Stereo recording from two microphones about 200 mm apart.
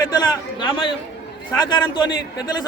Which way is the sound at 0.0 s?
20° left (ahead or behind).